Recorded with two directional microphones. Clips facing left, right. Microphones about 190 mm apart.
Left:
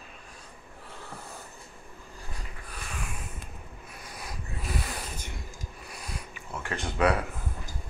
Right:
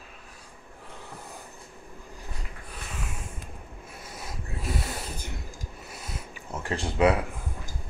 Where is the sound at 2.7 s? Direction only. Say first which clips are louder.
Even; 25° right (ahead or behind).